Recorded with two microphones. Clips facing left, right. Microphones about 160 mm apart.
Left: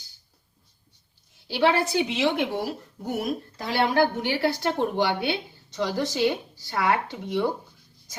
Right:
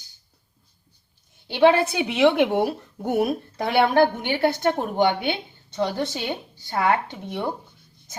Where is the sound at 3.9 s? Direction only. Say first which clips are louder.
Right 3 dB; 20° right (ahead or behind).